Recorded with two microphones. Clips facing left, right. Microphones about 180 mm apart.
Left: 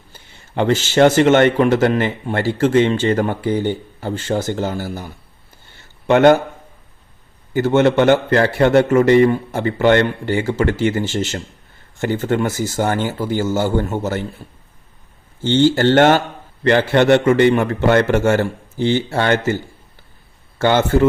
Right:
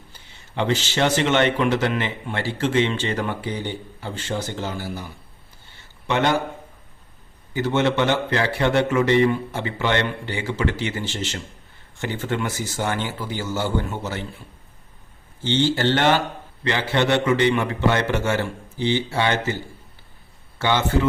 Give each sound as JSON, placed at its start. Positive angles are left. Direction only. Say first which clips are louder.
{"t": 0.1, "sound": "speech", "louder": "left 6 dB", "side_deg": 45}
{"t": 6.1, "sound": "speech", "louder": "left 10 dB", "side_deg": 50}
{"t": 7.5, "sound": "speech", "louder": "left 7 dB", "side_deg": 50}
{"t": 15.4, "sound": "speech", "louder": "left 7 dB", "side_deg": 45}
{"t": 20.6, "sound": "speech", "louder": "left 7 dB", "side_deg": 50}